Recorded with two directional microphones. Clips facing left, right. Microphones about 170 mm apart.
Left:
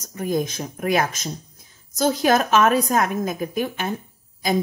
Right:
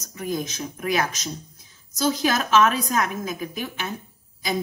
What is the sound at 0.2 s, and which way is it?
A woman's voice, 50° left (ahead or behind).